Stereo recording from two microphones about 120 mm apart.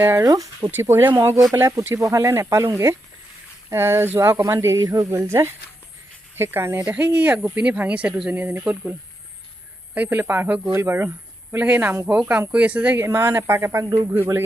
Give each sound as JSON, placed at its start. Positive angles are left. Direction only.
{"t": 0.0, "sound": "speech", "side_deg": -20}